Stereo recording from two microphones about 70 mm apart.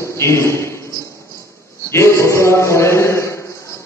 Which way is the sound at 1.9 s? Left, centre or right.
Left.